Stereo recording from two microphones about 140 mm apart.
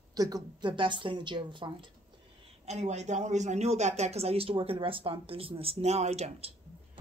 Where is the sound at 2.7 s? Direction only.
55° right (ahead or behind).